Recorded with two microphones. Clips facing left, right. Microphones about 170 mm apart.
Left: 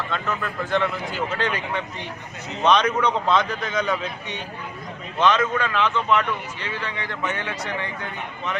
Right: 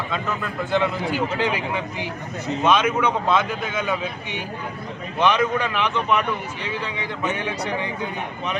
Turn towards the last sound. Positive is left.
turn(degrees=-15)  # may be behind; listen again after turning